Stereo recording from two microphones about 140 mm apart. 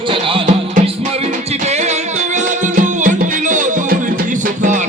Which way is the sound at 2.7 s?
70° right (ahead or behind).